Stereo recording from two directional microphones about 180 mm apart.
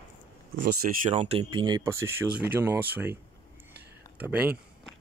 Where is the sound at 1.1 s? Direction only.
30° right (ahead or behind); by 3.2 s 10° right (ahead or behind).